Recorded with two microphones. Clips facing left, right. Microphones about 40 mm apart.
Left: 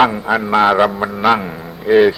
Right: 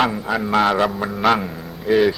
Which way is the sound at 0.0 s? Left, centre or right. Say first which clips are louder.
Left 6 dB; centre.